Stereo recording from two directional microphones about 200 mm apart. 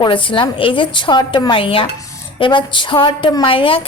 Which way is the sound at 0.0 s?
25° left (ahead or behind).